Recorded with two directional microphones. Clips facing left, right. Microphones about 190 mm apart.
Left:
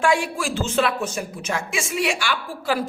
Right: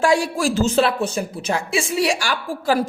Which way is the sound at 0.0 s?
40° right (ahead or behind).